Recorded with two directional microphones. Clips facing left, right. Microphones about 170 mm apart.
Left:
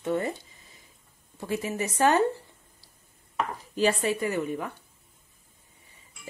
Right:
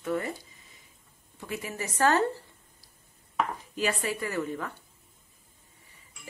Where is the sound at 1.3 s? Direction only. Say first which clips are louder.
Left 6 dB; 30° left (ahead or behind).